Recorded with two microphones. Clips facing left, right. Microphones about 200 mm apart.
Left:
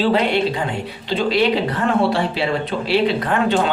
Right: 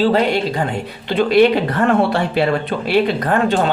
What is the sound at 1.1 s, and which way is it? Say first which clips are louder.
Speech: right 5 dB; 55° right (ahead or behind).